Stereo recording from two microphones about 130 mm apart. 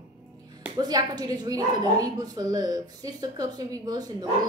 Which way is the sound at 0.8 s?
30° right (ahead or behind).